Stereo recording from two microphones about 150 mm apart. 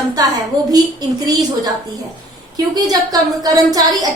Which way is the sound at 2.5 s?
25° right (ahead or behind).